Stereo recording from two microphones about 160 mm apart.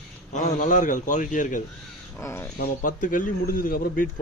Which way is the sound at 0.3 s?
50° left (ahead or behind).